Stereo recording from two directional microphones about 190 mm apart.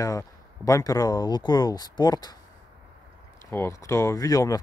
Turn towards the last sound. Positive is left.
turn(degrees=20)  # may be behind; listen again after turning